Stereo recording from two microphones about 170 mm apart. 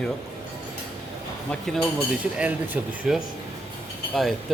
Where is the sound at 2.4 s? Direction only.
10° right (ahead or behind).